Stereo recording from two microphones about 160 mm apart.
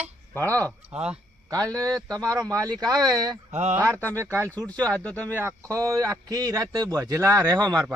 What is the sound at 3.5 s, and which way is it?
Speech, 45° right (ahead or behind).